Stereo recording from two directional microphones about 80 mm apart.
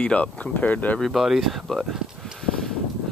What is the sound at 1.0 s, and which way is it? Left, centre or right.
Speech, centre.